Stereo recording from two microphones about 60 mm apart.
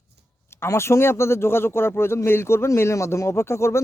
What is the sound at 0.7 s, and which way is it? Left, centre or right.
Speech, left.